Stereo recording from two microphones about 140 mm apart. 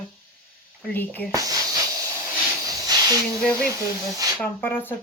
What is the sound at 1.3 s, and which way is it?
Hiss, 25° right (ahead or behind).